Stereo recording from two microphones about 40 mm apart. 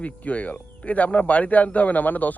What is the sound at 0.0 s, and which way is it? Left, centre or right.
Speech, left.